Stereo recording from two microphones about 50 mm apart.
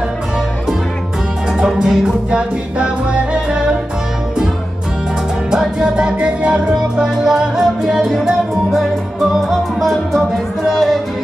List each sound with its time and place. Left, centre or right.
1.8 s music: centre
5.5 s music: centre
6.7 s music: centre
9.3 s music: centre